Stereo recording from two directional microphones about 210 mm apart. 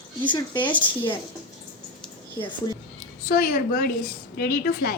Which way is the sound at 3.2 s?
45° left (ahead or behind).